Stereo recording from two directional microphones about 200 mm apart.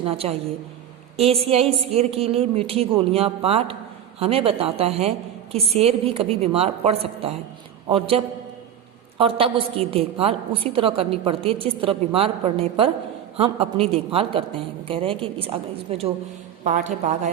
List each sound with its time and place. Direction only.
0.0 s a woman's voice: 30° right (ahead or behind)